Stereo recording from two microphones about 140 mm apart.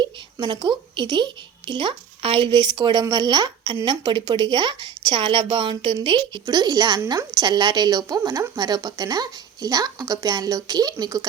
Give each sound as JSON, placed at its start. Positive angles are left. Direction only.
{"t": 0.0, "sound": "a woman's voice", "side_deg": -30}